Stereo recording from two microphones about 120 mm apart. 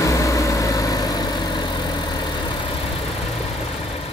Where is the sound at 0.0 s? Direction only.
25° left (ahead or behind).